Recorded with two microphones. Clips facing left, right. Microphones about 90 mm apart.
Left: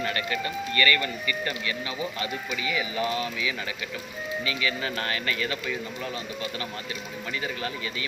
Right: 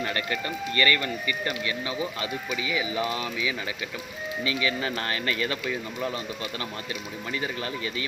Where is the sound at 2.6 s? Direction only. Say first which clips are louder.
Even; 20° right (ahead or behind).